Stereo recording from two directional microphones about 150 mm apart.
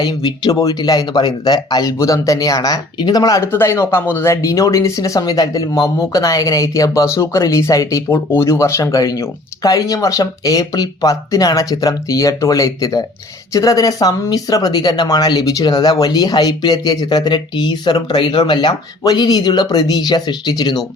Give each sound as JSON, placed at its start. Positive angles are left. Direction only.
{"t": 0.0, "sound": "speech", "side_deg": 25}